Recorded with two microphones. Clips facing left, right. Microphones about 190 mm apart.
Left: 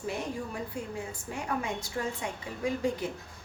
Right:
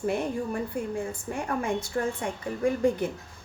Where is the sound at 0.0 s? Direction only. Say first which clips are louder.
Right 6 dB; 55° right (ahead or behind).